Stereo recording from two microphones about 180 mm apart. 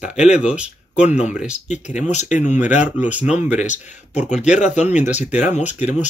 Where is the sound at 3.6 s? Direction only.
40° left (ahead or behind).